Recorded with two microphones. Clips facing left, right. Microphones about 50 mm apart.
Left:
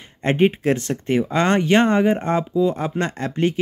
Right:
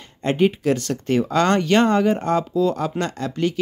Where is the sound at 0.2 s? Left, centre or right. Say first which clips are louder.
Left 1 dB; left.